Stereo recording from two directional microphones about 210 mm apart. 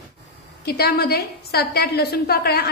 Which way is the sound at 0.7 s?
50° left (ahead or behind).